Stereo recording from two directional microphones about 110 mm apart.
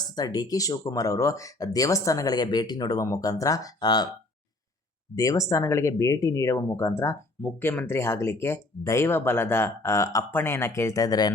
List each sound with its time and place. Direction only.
0.0 s speech: 35° left (ahead or behind)
5.1 s speech: 30° left (ahead or behind)